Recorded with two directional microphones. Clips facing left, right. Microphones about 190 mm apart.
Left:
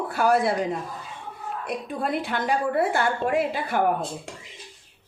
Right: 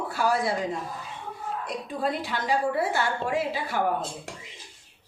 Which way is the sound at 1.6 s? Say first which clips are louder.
Left 2 dB; 55° left (ahead or behind).